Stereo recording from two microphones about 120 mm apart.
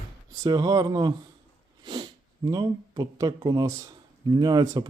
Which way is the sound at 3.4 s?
35° right (ahead or behind).